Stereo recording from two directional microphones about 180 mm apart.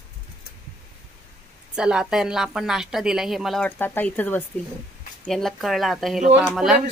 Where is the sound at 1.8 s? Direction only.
5° right (ahead or behind).